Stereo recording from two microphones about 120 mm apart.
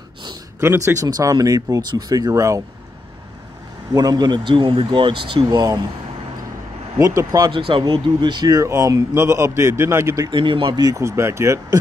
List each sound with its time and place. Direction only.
0.6 s speech: 20° right (ahead or behind)
3.9 s speech: 35° right (ahead or behind)
7.0 s speech: 25° right (ahead or behind)
7.5 s speech: 45° right (ahead or behind); by 10.3 s 25° right (ahead or behind)
10.3 s speech: 45° right (ahead or behind); by 11.8 s 25° right (ahead or behind)